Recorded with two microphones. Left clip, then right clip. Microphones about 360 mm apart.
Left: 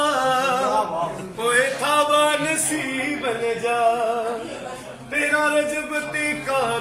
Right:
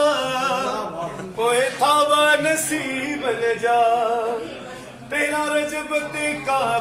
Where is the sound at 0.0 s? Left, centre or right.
Centre.